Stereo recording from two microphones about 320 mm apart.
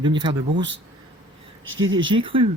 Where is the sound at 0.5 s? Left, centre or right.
Right.